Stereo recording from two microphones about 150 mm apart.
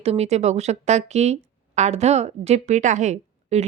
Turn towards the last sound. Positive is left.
turn(degrees=-50)  # may be behind; listen again after turning